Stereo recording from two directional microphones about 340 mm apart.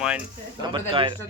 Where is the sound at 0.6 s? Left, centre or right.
Centre.